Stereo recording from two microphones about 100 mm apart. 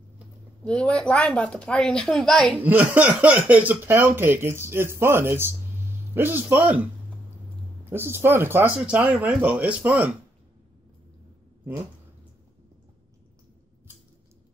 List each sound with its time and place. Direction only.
0.7 s a woman's voice: 10° left (ahead or behind)
2.5 s speech: 15° right (ahead or behind)